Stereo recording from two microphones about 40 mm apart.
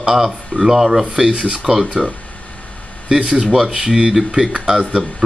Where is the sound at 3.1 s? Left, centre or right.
Centre.